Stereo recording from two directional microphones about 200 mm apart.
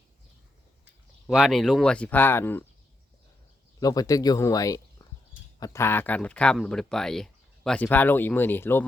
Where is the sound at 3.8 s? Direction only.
20° left (ahead or behind).